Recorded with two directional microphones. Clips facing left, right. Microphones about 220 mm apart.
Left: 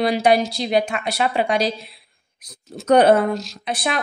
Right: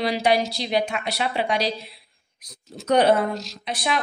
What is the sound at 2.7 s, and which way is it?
A woman's voice, 50° left (ahead or behind).